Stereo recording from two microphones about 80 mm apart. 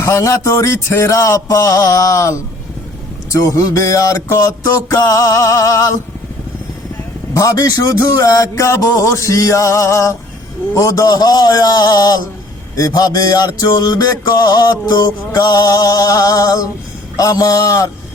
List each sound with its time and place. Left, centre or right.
0.0 s a man's voice: left
3.2 s music: left
7.3 s a man's voice: left
10.8 s music: left